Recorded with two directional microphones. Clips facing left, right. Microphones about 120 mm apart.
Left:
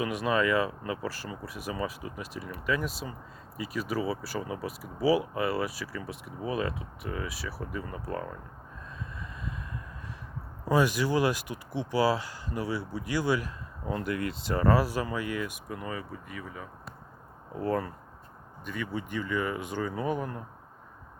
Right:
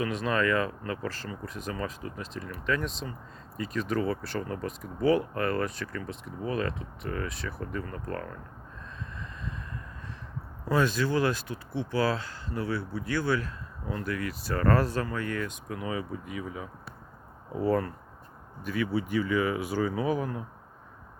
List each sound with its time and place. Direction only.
0.0 s speech: 10° left (ahead or behind)
10.7 s speech: 15° left (ahead or behind)
15.8 s speech: 10° right (ahead or behind)
17.6 s speech: centre (ahead or behind)